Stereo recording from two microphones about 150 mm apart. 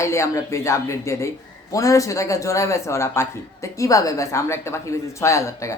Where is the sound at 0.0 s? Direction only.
20° left (ahead or behind).